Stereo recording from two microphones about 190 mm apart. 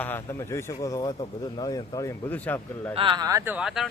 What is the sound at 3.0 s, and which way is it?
Speech, 25° right (ahead or behind).